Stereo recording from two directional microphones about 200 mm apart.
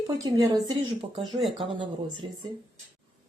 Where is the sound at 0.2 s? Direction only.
15° right (ahead or behind).